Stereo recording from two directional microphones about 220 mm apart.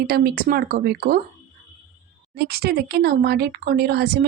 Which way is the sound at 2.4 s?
45° right (ahead or behind).